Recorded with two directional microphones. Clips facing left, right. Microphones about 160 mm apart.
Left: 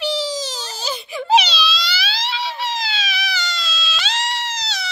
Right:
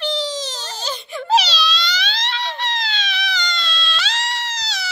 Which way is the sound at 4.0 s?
20° left (ahead or behind).